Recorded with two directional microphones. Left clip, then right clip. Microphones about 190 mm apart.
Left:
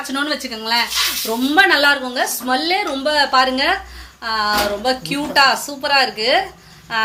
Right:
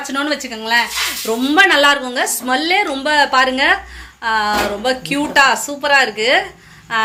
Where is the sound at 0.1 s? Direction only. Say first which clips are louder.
Right 2 dB; 5° right (ahead or behind).